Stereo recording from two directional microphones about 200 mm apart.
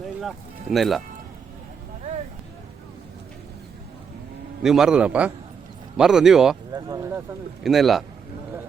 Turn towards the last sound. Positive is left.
turn(degrees=0)  # may be behind; listen again after turning